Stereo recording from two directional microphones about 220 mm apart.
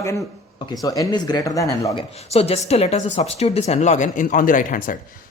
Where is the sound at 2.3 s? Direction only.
30° left (ahead or behind).